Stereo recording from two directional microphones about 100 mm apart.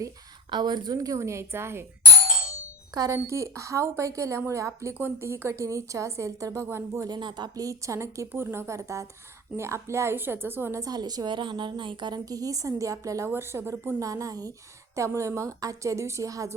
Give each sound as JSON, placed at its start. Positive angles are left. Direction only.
{"t": 0.5, "sound": "a woman's voice", "side_deg": -45}
{"t": 2.9, "sound": "a woman's voice", "side_deg": -40}
{"t": 7.1, "sound": "a woman's voice", "side_deg": -45}
{"t": 10.8, "sound": "a woman's voice", "side_deg": -40}
{"t": 14.0, "sound": "a woman's voice", "side_deg": -35}